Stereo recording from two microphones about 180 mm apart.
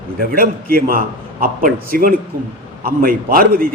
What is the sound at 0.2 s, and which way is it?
A man's voice, 55° right (ahead or behind).